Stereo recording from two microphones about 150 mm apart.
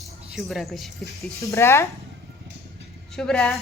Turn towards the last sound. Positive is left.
turn(degrees=5)  # may be behind; listen again after turning